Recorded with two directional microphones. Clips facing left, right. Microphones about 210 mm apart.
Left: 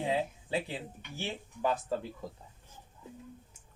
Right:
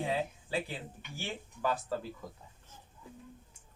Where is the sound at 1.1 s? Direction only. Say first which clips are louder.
Left 2 dB; 20° left (ahead or behind).